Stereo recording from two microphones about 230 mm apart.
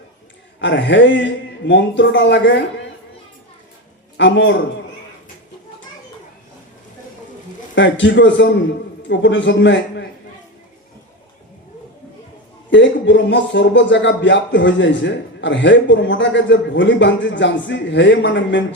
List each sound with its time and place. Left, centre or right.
0.6 s a man's voice: left
4.2 s a man's voice: left
7.8 s a man's voice: left
12.7 s a man's voice: left